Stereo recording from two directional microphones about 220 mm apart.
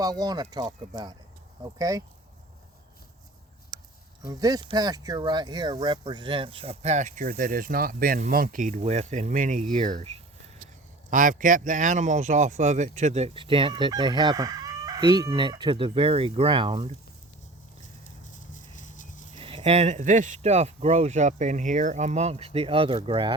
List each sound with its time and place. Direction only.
0.0 s speech: 15° right (ahead or behind)
4.2 s speech: 15° right (ahead or behind)
18.3 s clip-clop: 35° left (ahead or behind)
19.4 s speech: 25° right (ahead or behind)